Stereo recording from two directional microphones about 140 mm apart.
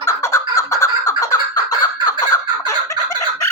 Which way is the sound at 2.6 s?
25° left (ahead or behind).